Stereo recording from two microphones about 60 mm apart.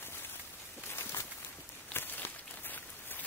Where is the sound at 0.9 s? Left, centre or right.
Left.